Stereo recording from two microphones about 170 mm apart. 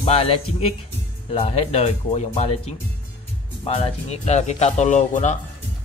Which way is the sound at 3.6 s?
35° left (ahead or behind).